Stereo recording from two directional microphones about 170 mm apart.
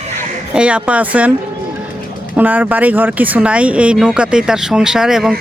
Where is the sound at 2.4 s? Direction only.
10° right (ahead or behind).